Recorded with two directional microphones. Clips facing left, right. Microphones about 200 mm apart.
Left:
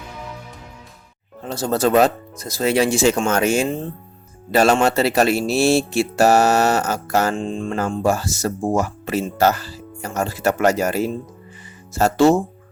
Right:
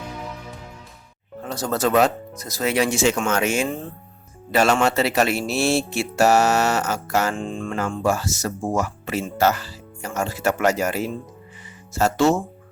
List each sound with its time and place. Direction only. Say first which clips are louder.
1.5 s speech: left 3 dB; 30° left (ahead or behind)
7.3 s music: left 4 dB; 25° left (ahead or behind)
7.9 s speech: left 2 dB; 35° left (ahead or behind)